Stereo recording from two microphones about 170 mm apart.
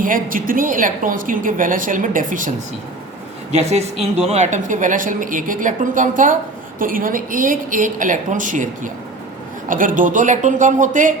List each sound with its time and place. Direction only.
0.0 s a woman's voice: 55° right (ahead or behind)
3.5 s a woman's voice: 35° right (ahead or behind)